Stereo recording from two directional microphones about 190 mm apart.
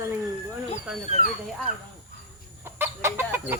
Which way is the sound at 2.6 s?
10° right (ahead or behind).